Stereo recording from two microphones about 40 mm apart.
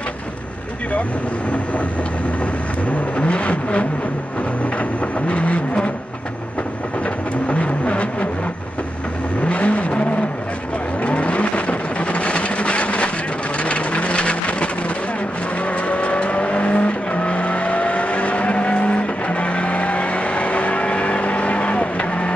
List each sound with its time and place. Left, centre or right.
2.9 s vehicle: left
5.3 s vehicle: left
7.4 s vehicle: left
9.4 s vehicle: left